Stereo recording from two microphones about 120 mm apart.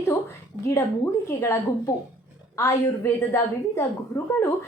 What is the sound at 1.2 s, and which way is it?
A woman's voice, 25° left (ahead or behind).